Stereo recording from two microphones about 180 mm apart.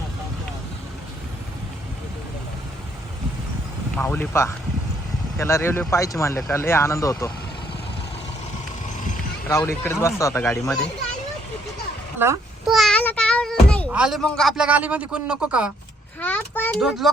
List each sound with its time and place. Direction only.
3.9 s speech: 10° left (ahead or behind)
9.5 s speech: 15° left (ahead or behind)
12.2 s a child's voice: 10° right (ahead or behind)
12.6 s a sound: centre (ahead or behind)
13.9 s speech: 5° right (ahead or behind)
16.2 s speech: 10° left (ahead or behind)